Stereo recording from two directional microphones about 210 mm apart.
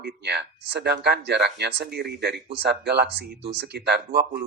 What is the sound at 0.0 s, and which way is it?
Speech, 50° right (ahead or behind).